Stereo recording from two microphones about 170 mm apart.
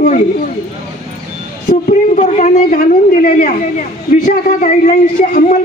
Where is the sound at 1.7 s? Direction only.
45° left (ahead or behind).